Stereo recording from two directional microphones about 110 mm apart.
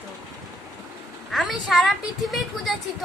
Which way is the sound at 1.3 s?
Centre (ahead or behind).